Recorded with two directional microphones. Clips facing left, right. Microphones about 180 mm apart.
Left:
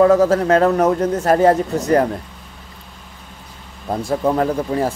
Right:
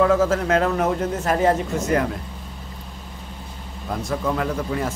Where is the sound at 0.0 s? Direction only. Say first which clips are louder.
Left 5 dB; 40° left (ahead or behind).